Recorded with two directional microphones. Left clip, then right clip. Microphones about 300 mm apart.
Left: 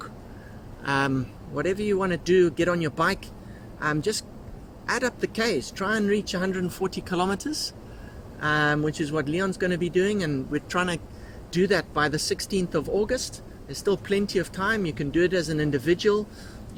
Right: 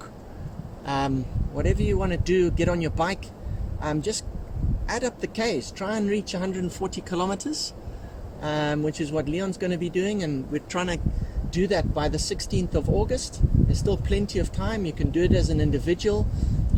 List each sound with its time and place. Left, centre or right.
0.9 s speech: centre